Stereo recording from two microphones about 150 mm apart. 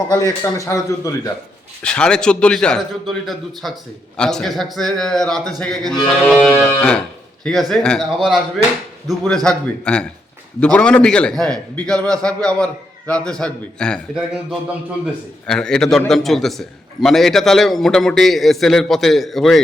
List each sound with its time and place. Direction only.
0.1 s a man's voice: 20° left (ahead or behind)
1.8 s a man's voice: 5° left (ahead or behind)
6.2 s music: 5° left (ahead or behind)
7.4 s a man's voice: centre (ahead or behind)